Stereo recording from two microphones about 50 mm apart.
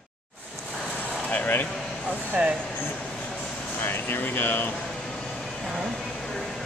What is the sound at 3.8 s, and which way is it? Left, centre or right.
Speech, left.